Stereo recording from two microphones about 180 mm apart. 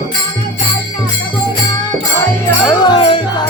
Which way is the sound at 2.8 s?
25° left (ahead or behind).